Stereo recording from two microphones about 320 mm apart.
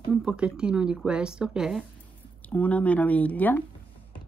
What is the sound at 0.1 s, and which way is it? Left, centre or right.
Speech, centre.